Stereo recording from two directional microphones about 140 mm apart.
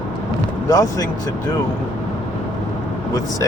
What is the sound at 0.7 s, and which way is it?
Speech, 25° left (ahead or behind).